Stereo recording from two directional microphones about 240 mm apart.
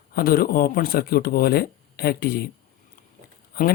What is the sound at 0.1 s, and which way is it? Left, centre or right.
Speech, left.